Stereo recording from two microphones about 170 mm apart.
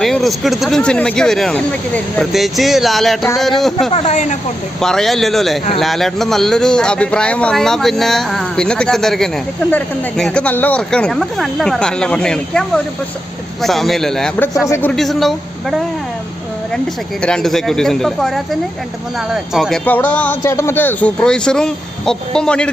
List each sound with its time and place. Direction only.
0.0 s a man's voice: centre (ahead or behind)
3.9 s speech: 40° left (ahead or behind)
4.8 s a man's voice: centre (ahead or behind)
17.2 s a man's voice: 5° left (ahead or behind)